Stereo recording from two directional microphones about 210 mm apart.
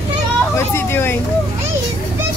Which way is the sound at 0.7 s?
10° left (ahead or behind).